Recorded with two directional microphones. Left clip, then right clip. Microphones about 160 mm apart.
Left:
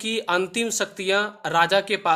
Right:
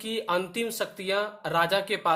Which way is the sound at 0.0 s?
35° left (ahead or behind).